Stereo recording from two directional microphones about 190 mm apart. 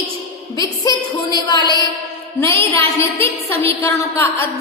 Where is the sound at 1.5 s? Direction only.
20° left (ahead or behind).